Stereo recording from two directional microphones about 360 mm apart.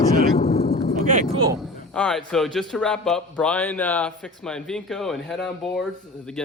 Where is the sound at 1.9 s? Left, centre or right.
Centre.